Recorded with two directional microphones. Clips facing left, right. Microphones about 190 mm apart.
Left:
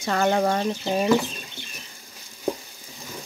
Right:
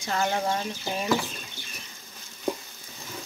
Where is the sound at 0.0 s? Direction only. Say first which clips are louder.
Left 6 dB; 60° left (ahead or behind).